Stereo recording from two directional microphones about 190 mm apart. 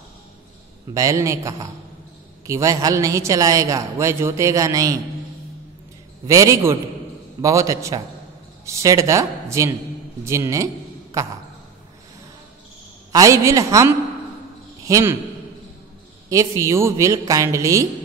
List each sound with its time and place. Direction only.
0.9 s a man's voice: 15° right (ahead or behind)
6.2 s a man's voice: 15° right (ahead or behind)
13.1 s a man's voice: 15° right (ahead or behind)
16.3 s a man's voice: 15° right (ahead or behind)